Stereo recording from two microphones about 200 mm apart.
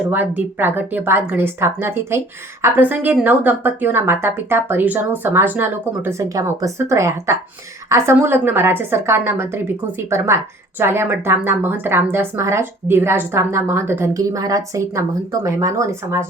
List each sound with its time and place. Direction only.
0.1 s a woman's voice: 10° right (ahead or behind)